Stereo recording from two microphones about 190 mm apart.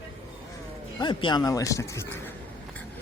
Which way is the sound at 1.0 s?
25° left (ahead or behind).